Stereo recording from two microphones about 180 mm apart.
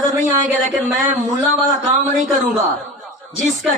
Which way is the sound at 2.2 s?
45° right (ahead or behind).